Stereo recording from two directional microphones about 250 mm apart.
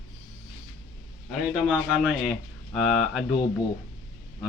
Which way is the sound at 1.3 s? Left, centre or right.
Centre.